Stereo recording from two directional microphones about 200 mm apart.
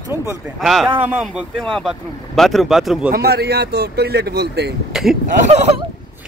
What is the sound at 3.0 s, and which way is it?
Speech, 50° right (ahead or behind).